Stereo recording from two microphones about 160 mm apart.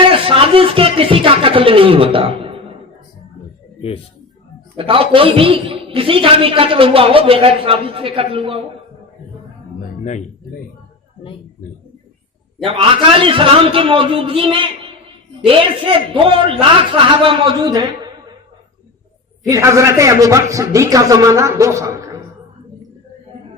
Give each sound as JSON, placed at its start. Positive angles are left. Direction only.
{"t": 0.1, "sound": "speech", "side_deg": -35}
{"t": 3.8, "sound": "a man's voice", "side_deg": 35}
{"t": 4.8, "sound": "a man's voice", "side_deg": -35}
{"t": 10.0, "sound": "speech", "side_deg": 50}
{"t": 12.6, "sound": "a man's voice", "side_deg": -35}
{"t": 19.5, "sound": "a man's voice", "side_deg": -20}